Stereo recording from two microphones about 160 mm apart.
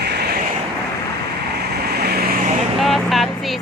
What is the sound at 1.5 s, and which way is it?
Vehicle, 90° right.